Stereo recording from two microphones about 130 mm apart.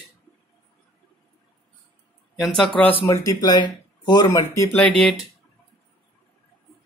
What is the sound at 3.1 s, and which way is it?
Speech, 30° left (ahead or behind).